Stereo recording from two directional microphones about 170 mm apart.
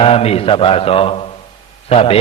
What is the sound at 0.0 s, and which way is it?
Mantra, 35° left (ahead or behind).